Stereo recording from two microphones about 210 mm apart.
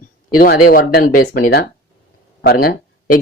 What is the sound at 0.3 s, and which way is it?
Speech, 45° left (ahead or behind).